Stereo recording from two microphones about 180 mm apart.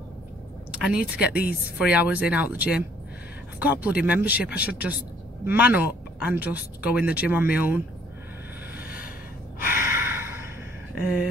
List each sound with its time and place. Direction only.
0.9 s speech: 5° right (ahead or behind)
9.6 s gasp: 10° right (ahead or behind)
11.0 s speech: 10° right (ahead or behind)